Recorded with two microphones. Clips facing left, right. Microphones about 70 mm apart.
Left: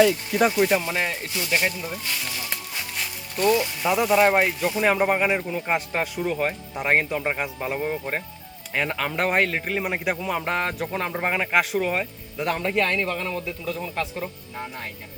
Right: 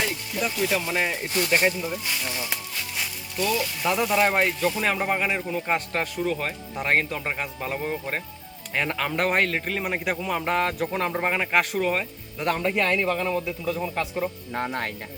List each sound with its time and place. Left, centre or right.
0.3 s speech: left
0.7 s speech: centre
0.9 s speech: centre
3.3 s speech: left
3.8 s speech: centre
14.5 s speech: right